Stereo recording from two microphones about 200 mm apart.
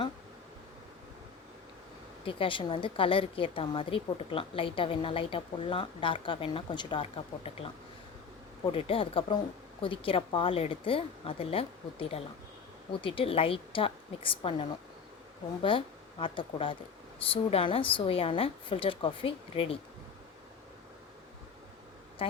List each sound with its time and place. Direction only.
2.2 s a woman's voice: 25° left (ahead or behind)